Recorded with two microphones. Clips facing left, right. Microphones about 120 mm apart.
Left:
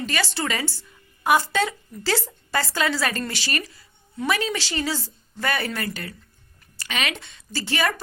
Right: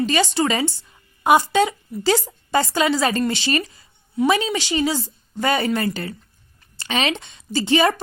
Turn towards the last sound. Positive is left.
turn(degrees=-20)  # may be behind; listen again after turning